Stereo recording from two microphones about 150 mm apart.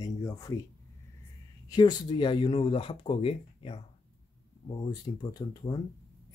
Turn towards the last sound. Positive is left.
turn(degrees=25)  # may be behind; listen again after turning